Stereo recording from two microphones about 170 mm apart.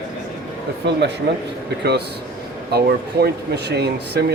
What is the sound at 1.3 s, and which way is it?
Speech, 90° right.